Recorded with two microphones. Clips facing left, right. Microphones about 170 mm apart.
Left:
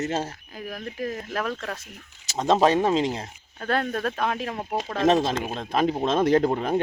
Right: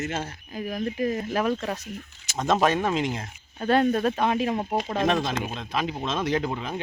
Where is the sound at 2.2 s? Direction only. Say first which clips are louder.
Left 3 dB; 35° left (ahead or behind).